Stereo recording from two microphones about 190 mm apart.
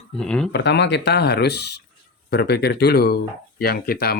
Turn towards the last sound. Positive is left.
turn(degrees=55)  # may be behind; listen again after turning